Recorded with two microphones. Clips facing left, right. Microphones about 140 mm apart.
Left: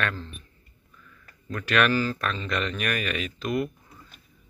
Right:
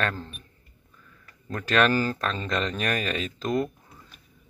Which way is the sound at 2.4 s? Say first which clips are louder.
Right 2 dB; 25° right (ahead or behind).